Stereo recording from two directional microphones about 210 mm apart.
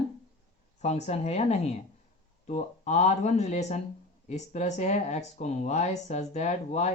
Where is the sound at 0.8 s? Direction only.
30° left (ahead or behind).